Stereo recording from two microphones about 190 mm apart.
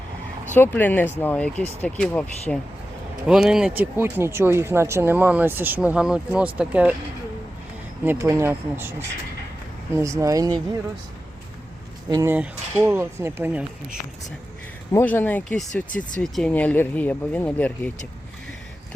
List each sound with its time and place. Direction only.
0.5 s speech: 10° left (ahead or behind); by 6.9 s 5° right (ahead or behind)
8.0 s speech: 15° right (ahead or behind)
12.1 s speech: 10° right (ahead or behind)
14.9 s speech: 10° left (ahead or behind)
15.9 s speech: 45° left (ahead or behind)
16.2 s speech: 5° left (ahead or behind)